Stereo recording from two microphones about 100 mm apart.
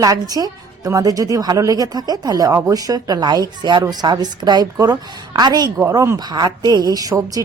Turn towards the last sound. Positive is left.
turn(degrees=-35)  # may be behind; listen again after turning